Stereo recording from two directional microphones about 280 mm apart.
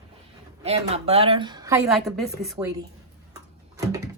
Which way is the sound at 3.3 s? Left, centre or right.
Centre.